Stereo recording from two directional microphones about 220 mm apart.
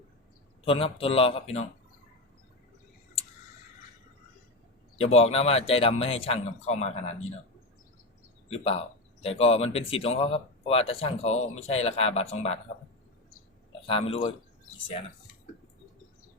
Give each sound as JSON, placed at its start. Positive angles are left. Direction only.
{"t": 0.6, "sound": "speech", "side_deg": 25}
{"t": 4.9, "sound": "speech", "side_deg": 30}
{"t": 8.4, "sound": "speech", "side_deg": 25}
{"t": 13.8, "sound": "speech", "side_deg": 25}